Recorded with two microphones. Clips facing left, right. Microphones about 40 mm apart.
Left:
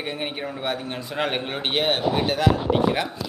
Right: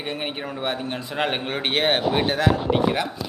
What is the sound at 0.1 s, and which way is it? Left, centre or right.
A man's voice, centre.